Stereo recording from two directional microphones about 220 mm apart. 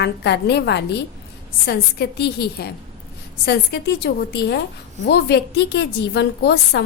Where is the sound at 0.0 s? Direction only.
50° left (ahead or behind).